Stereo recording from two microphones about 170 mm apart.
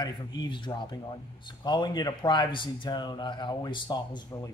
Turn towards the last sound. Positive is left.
turn(degrees=25)  # may be behind; listen again after turning